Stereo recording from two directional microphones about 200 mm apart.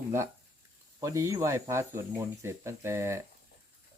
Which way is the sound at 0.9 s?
15° right (ahead or behind).